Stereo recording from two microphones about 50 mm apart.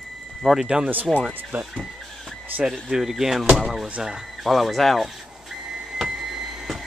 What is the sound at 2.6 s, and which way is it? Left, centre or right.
Speech, centre.